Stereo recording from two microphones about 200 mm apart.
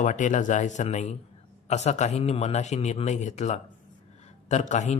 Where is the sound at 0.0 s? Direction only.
40° left (ahead or behind).